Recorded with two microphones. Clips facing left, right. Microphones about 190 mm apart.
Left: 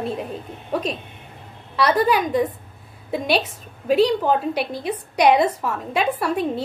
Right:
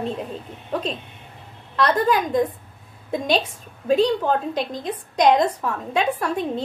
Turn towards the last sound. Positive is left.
turn(degrees=10)  # may be behind; listen again after turning